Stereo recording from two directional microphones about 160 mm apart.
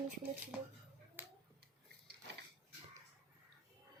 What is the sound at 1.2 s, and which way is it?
Finger snapping, 15° right (ahead or behind).